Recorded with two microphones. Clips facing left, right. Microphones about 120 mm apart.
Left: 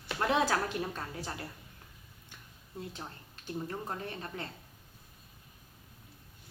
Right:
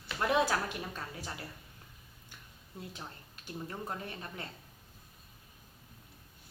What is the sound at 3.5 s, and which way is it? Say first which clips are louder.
Speech: left 3 dB; 30° left (ahead or behind).